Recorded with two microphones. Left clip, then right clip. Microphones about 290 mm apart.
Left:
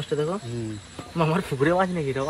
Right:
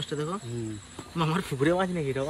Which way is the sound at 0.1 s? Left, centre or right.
Left.